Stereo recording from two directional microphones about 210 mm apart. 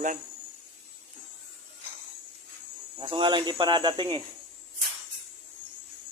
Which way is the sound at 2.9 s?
25° right (ahead or behind).